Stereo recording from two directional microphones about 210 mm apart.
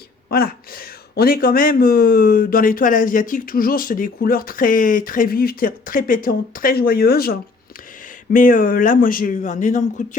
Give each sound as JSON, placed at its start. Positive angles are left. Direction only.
{"t": 0.3, "sound": "speech", "side_deg": 45}